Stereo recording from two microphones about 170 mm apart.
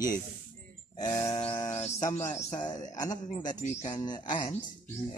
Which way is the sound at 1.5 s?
20° left (ahead or behind).